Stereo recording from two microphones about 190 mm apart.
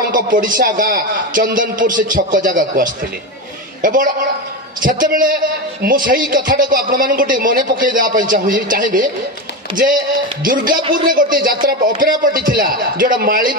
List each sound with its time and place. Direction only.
0.1 s speech: 45° right (ahead or behind)
10.4 s speech: 45° right (ahead or behind)
10.8 s a man's voice: 25° right (ahead or behind)
11.1 s speech: 45° right (ahead or behind)